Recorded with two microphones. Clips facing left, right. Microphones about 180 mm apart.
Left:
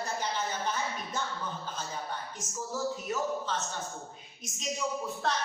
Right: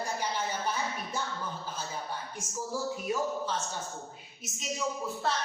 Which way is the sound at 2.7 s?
10° right (ahead or behind).